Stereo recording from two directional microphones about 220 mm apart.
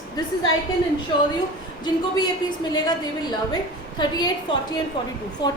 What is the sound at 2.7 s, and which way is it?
A woman's voice, 20° left (ahead or behind).